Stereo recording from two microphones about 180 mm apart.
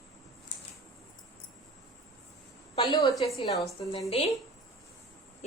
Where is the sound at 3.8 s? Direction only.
30° left (ahead or behind).